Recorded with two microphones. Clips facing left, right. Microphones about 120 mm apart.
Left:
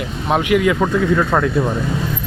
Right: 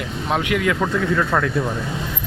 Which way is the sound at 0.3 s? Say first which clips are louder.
Left 5 dB; 20° left (ahead or behind).